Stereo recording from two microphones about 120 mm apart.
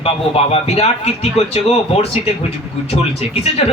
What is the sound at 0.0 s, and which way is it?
Speech, 55° left (ahead or behind).